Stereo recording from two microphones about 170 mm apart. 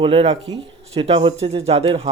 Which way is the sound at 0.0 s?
35° right (ahead or behind).